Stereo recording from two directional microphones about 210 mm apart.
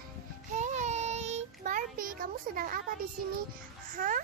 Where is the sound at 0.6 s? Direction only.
35° right (ahead or behind).